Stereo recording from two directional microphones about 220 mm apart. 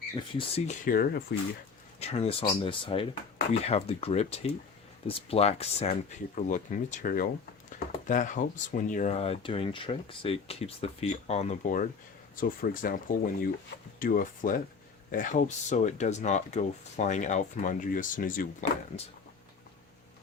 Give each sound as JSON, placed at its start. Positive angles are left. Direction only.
{"t": 0.3, "sound": "speech", "side_deg": 25}
{"t": 0.9, "sound": "speech", "side_deg": 40}
{"t": 2.0, "sound": "speech", "side_deg": 30}